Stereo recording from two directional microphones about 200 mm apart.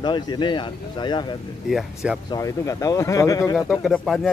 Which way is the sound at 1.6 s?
Centre (ahead or behind).